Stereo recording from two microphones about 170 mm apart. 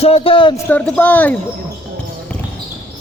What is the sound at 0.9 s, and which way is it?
Speech, 10° left (ahead or behind).